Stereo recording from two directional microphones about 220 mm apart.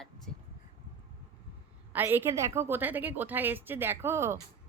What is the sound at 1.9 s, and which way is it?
A woman's voice, 10° right (ahead or behind).